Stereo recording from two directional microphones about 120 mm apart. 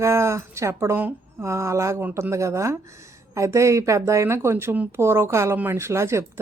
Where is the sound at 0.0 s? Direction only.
25° right (ahead or behind).